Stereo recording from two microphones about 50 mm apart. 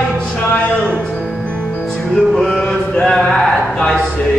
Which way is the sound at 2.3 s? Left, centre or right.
Centre.